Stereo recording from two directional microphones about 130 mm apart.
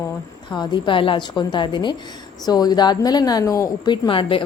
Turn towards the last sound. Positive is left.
turn(degrees=45)  # may be behind; listen again after turning